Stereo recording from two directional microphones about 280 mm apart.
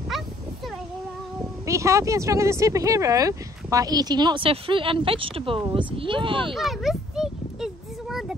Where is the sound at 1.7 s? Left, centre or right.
Centre.